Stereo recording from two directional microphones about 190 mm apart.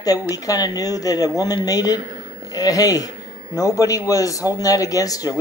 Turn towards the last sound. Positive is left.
turn(degrees=20)  # may be behind; listen again after turning